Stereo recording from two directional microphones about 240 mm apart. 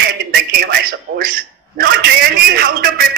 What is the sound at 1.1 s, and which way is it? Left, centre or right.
Speech, right.